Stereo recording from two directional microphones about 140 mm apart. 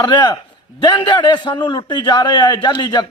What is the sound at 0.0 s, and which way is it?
A man's voice, 30° left (ahead or behind).